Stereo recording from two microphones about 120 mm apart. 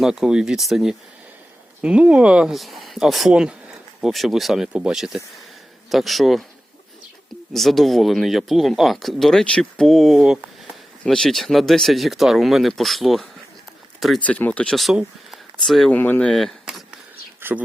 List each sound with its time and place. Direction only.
0.0 s speech: 5° right (ahead or behind)
7.5 s speech: centre (ahead or behind)
14.2 s speech: 15° left (ahead or behind)
16.0 s speech: 15° left (ahead or behind)
16.3 s vehicle: centre (ahead or behind)
17.4 s speech: 20° right (ahead or behind)